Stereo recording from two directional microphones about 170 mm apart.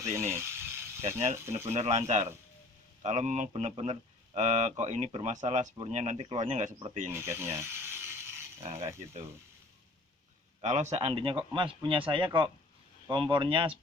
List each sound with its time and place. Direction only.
0.0 s speech: 15° right (ahead or behind)
0.3 s mechanisms: 15° right (ahead or behind)
1.4 s speech: 15° right (ahead or behind)
1.6 s speech: 40° right (ahead or behind)
7.1 s mechanisms: 15° right (ahead or behind)
10.6 s speech: 45° right (ahead or behind)